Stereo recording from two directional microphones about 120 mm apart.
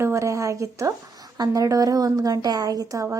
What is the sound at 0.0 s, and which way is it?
A woman's voice, 25° right (ahead or behind).